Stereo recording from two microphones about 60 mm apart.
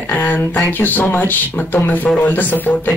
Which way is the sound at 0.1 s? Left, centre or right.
Left.